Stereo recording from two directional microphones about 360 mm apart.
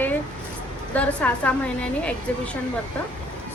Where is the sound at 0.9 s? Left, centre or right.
Centre.